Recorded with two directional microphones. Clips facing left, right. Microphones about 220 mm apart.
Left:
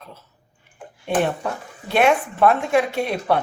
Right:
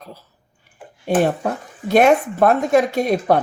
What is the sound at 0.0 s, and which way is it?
Speech, 35° right (ahead or behind).